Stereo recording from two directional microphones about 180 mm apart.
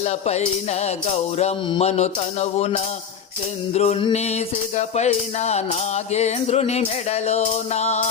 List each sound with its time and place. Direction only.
0.0 s music: 40° left (ahead or behind)